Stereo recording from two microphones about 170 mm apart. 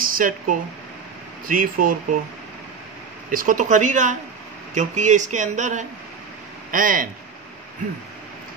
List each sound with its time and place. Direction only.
0.0 s speech: 55° right (ahead or behind)
3.3 s speech: 55° right (ahead or behind)